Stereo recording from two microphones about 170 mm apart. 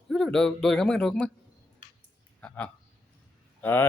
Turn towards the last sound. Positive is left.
turn(degrees=10)  # may be behind; listen again after turning